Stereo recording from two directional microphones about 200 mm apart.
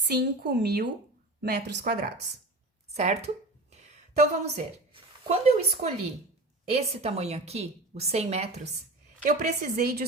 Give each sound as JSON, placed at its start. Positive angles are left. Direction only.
{"t": 0.1, "sound": "a woman's voice", "side_deg": -55}
{"t": 2.9, "sound": "a sound", "side_deg": -35}
{"t": 5.8, "sound": "a woman's voice", "side_deg": -30}
{"t": 9.2, "sound": "a woman's voice", "side_deg": -45}